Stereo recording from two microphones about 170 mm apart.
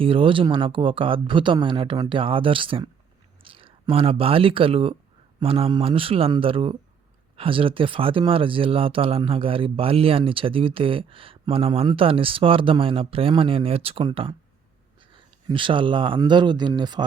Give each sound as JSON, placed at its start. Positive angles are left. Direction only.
{"t": 0.0, "sound": "speech", "side_deg": -30}
{"t": 15.4, "sound": "speech", "side_deg": -30}